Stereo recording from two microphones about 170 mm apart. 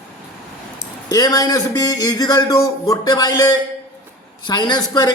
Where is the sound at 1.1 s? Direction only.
20° left (ahead or behind).